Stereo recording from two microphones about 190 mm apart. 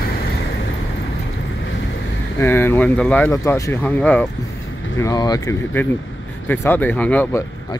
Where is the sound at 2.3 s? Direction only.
10° left (ahead or behind).